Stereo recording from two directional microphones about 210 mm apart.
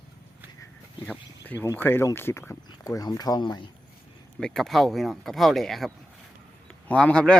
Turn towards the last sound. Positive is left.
turn(degrees=5)  # may be behind; listen again after turning